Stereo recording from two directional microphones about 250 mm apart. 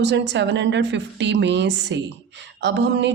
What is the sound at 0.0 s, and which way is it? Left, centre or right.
Speech, right.